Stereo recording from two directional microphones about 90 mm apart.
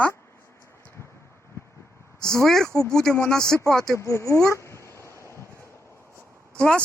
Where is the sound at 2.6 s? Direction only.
35° left (ahead or behind).